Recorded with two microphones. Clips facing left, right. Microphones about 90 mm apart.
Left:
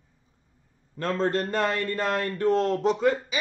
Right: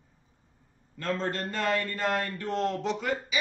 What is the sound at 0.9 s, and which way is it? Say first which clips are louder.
A man's voice: left 5 dB; 45° left (ahead or behind).